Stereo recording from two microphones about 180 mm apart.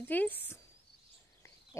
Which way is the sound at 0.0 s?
10° left (ahead or behind).